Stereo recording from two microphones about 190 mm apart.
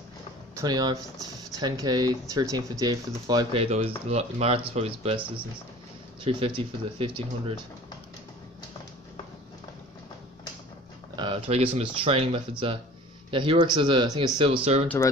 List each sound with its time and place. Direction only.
0.6 s speech: 20° right (ahead or behind)
6.2 s speech: 30° right (ahead or behind)
11.1 s speech: 25° right (ahead or behind)